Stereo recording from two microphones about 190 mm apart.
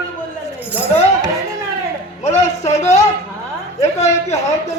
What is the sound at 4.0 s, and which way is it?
Speech, 35° left (ahead or behind).